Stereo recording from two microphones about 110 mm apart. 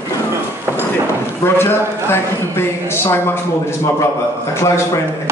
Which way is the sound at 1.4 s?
20° left (ahead or behind).